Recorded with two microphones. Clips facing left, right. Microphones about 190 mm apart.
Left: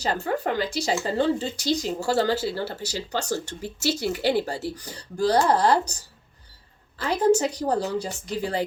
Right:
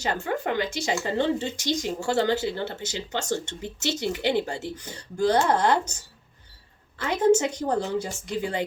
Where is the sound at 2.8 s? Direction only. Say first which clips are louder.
Left 1 dB; 20° right (ahead or behind).